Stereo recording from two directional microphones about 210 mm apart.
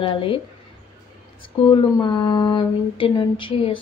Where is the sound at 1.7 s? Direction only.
20° left (ahead or behind).